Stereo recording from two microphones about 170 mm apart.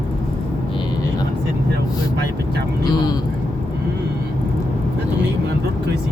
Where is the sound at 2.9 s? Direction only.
25° left (ahead or behind).